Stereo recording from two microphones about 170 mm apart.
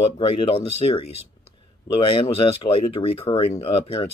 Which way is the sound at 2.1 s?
30° left (ahead or behind).